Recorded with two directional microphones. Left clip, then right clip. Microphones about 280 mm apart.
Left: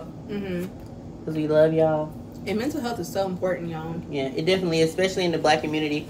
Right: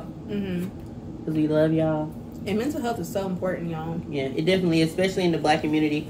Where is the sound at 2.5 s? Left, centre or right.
Centre.